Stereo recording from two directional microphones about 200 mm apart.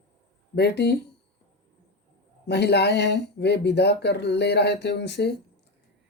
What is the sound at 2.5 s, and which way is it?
Speech, 55° left (ahead or behind).